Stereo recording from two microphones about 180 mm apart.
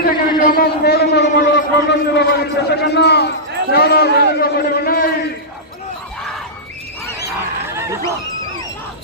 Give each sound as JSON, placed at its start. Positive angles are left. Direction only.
{"t": 0.0, "sound": "a man's voice", "side_deg": 55}
{"t": 7.7, "sound": "dog", "side_deg": -15}